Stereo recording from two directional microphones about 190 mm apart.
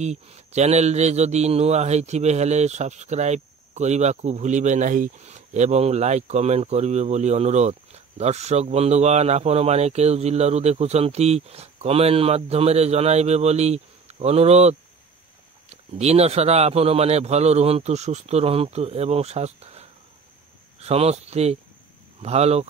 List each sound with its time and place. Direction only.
0.0 s speech: 35° right (ahead or behind)